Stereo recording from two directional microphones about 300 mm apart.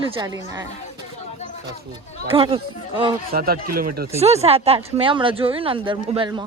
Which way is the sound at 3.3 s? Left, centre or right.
Right.